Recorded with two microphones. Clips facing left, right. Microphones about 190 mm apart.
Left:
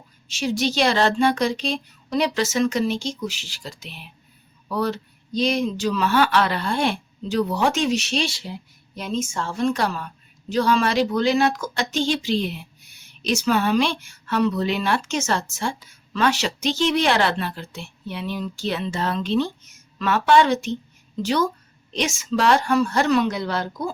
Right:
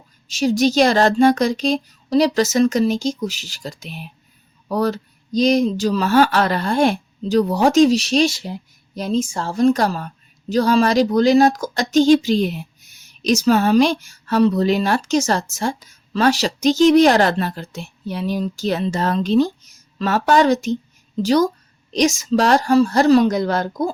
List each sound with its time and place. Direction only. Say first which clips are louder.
0.3 s speech: right 7 dB; 40° right (ahead or behind)